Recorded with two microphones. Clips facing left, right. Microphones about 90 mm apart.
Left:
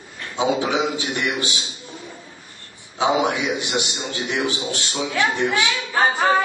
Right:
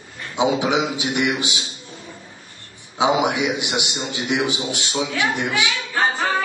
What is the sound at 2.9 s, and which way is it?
A man's voice, 15° right (ahead or behind).